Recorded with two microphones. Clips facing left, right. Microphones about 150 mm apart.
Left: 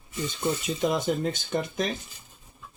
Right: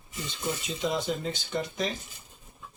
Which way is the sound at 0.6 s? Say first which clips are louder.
Left 3 dB; 50° left (ahead or behind).